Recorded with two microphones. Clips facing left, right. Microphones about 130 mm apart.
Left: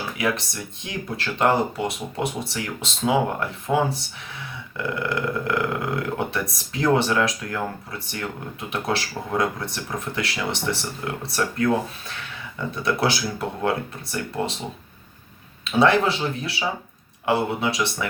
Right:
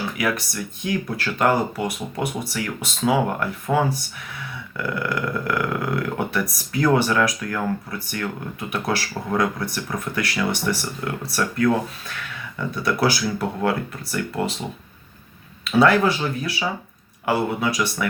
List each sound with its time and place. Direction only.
0.2 s speech: 25° left (ahead or behind)
15.6 s speech: 25° left (ahead or behind)